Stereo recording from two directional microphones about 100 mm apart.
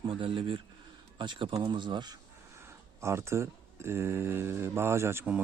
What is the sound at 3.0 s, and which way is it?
Speech, 25° right (ahead or behind).